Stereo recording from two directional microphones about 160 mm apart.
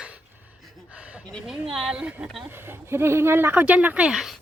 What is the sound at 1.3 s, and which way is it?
Speech, 5° right (ahead or behind).